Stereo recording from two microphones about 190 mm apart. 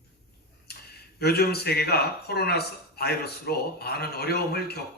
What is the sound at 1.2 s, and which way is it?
Speech, 55° left (ahead or behind).